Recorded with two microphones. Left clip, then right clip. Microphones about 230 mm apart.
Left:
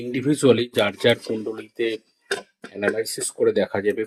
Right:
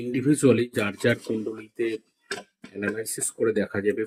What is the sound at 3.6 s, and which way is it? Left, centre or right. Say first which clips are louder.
Speech: left 4 dB; left.